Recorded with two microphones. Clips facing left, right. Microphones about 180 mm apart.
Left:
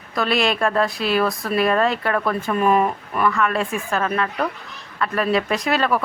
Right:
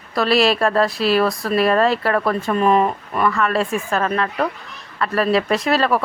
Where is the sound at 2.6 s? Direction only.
30° right (ahead or behind).